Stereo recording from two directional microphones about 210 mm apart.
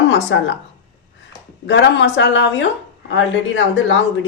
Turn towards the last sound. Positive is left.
turn(degrees=60)  # may be behind; listen again after turning